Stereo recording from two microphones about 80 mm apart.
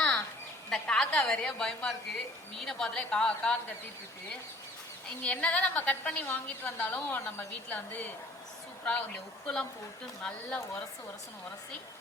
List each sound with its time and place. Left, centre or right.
0.7 s a woman's voice: centre
5.2 s a woman's voice: centre